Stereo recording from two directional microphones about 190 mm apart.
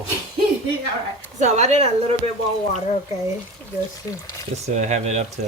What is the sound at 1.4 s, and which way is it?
Speech, 35° right (ahead or behind).